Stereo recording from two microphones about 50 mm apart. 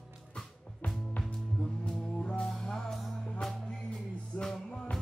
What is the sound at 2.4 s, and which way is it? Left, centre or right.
Music, centre.